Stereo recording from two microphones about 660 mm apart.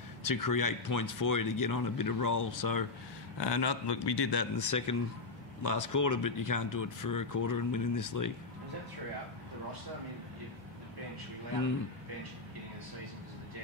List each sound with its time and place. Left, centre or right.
0.2 s a man's voice: left